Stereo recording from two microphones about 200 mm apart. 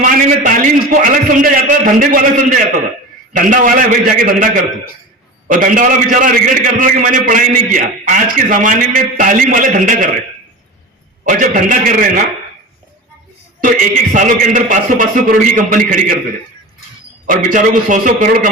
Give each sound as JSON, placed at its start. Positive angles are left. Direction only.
{"t": 0.0, "sound": "a man's voice", "side_deg": -40}
{"t": 11.3, "sound": "a man's voice", "side_deg": -40}
{"t": 13.6, "sound": "a man's voice", "side_deg": -40}
{"t": 17.2, "sound": "a man's voice", "side_deg": -40}